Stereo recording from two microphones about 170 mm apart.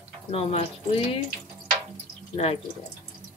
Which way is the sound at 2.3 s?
40° left (ahead or behind).